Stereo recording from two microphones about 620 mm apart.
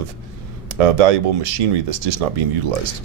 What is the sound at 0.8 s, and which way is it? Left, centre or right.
Speech, right.